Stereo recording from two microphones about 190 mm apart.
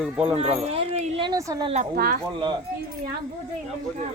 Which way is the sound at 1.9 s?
50° right (ahead or behind).